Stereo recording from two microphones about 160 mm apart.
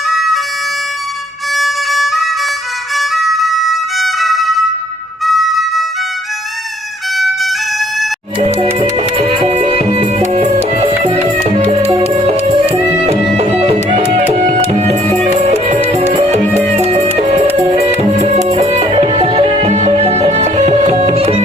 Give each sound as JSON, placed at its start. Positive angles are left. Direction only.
{"t": 1.5, "sound": "music", "side_deg": 0}
{"t": 2.9, "sound": "violin", "side_deg": 0}
{"t": 5.2, "sound": "music", "side_deg": 0}
{"t": 7.2, "sound": "music", "side_deg": 0}
{"t": 8.6, "sound": "music", "side_deg": -40}